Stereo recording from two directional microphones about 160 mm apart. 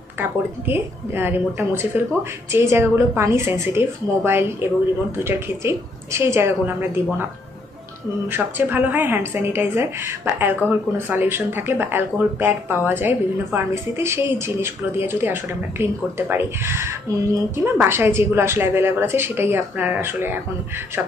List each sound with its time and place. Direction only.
0.2 s a woman's voice: 15° right (ahead or behind)
8.3 s a woman's voice: 10° right (ahead or behind)